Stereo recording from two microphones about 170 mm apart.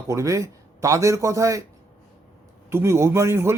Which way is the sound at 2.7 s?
15° right (ahead or behind).